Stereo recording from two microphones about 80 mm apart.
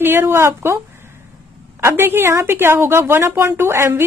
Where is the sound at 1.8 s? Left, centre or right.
Right.